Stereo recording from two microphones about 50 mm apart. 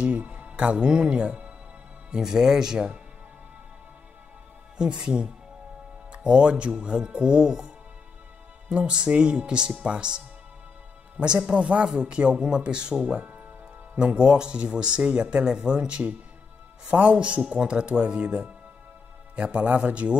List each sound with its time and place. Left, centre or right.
0.0 s speech: right; by 3.0 s centre
4.7 s speech: centre